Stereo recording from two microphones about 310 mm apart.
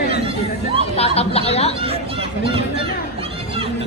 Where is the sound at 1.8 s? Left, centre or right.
Centre.